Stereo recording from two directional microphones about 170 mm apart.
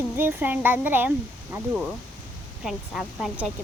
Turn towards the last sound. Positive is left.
turn(degrees=0)  # may be behind; listen again after turning